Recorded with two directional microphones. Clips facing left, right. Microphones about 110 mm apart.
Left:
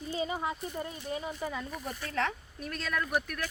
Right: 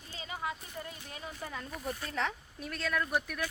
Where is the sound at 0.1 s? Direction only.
25° left (ahead or behind).